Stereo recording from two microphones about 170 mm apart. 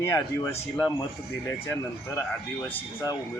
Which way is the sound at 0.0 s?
20° left (ahead or behind).